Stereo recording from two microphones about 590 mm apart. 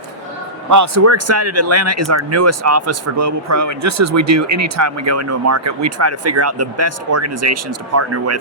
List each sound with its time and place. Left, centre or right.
0.7 s speech: right